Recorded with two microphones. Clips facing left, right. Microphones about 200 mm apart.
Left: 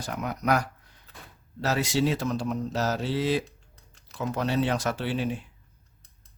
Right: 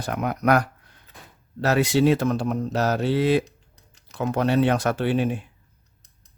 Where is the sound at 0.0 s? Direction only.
60° right (ahead or behind).